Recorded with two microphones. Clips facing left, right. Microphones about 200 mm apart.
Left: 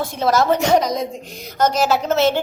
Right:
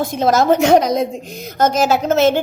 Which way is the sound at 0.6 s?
55° right (ahead or behind).